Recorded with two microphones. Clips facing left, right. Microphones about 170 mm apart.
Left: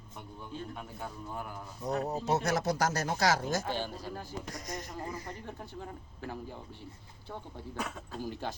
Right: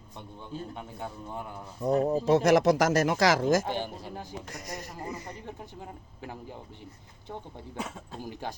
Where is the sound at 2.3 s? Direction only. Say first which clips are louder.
Right 9 dB; 90° right.